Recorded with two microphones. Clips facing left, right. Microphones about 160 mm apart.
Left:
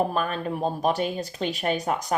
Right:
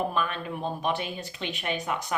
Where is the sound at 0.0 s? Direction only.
40° left (ahead or behind).